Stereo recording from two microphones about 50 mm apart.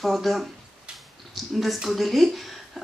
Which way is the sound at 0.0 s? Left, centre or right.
Centre.